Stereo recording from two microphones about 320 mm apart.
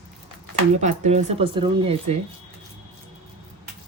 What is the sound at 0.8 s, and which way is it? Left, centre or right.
A man's voice, right.